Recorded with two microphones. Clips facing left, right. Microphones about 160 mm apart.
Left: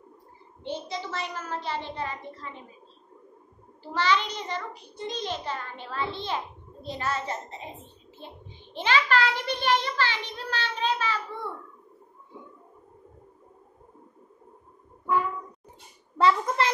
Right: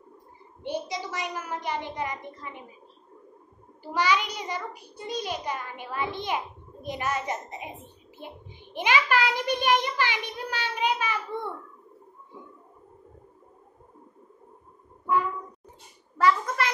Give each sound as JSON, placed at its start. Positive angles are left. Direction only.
{"t": 0.7, "sound": "a child's voice", "side_deg": -15}
{"t": 3.8, "sound": "a child's voice", "side_deg": -10}
{"t": 16.2, "sound": "a child's voice", "side_deg": 25}